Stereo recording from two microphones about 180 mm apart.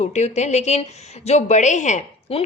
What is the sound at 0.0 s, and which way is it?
A woman's voice, 40° left (ahead or behind).